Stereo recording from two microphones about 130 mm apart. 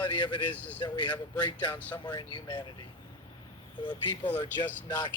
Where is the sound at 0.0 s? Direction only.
35° left (ahead or behind).